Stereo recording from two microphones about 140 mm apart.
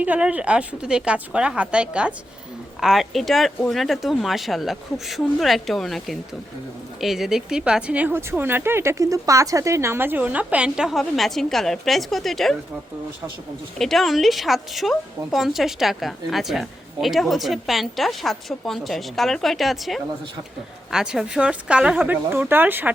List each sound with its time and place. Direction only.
0.0 s speech: 10° right (ahead or behind)
13.7 s speech: centre (ahead or behind); by 22.9 s 15° right (ahead or behind)